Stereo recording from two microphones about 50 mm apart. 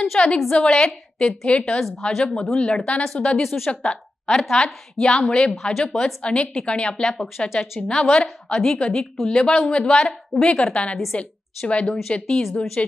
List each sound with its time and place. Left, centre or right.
0.2 s a woman's voice: left
3.4 s speech: centre
5.0 s a woman's voice: centre
5.5 s speech: centre
5.9 s a woman's voice: left
7.3 s speech: centre
7.9 s a woman's voice: centre
9.1 s a woman's voice: centre; by 12.9 s left